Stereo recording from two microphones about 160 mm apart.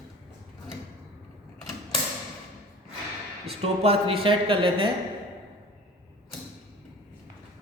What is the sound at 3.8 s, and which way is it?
Speech, 35° right (ahead or behind).